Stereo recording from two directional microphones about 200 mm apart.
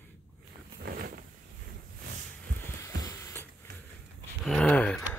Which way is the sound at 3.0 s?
15° left (ahead or behind).